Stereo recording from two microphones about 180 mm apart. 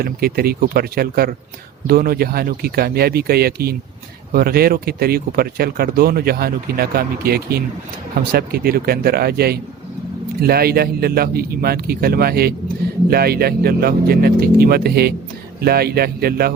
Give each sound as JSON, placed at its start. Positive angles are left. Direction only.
{"t": 0.0, "sound": "speech", "side_deg": -55}